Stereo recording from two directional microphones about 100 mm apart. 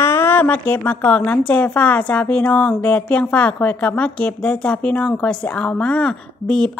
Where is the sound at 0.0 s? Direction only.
25° left (ahead or behind).